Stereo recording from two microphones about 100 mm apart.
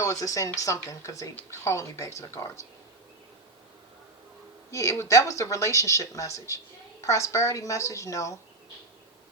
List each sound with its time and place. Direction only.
0.0 s a woman's voice: 35° left (ahead or behind)
4.7 s speech: 30° left (ahead or behind)